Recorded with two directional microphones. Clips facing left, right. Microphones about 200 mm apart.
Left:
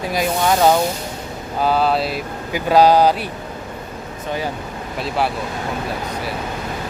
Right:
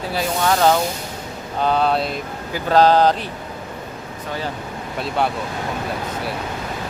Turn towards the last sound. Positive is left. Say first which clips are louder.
# even
turn(degrees=0)  # may be behind; listen again after turning